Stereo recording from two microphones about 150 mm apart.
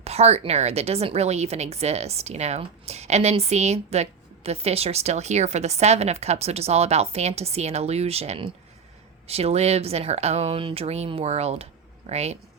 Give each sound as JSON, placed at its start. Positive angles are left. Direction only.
{"t": 0.0, "sound": "a woman's voice", "side_deg": -45}